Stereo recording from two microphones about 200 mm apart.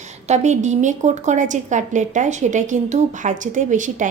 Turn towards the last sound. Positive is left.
turn(degrees=-40)  # may be behind; listen again after turning